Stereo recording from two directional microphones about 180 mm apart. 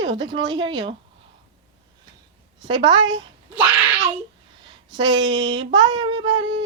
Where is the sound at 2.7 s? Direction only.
25° right (ahead or behind).